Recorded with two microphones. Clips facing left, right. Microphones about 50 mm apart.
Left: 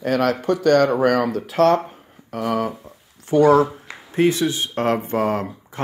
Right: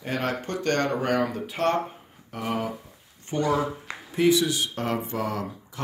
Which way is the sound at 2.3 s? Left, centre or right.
Left.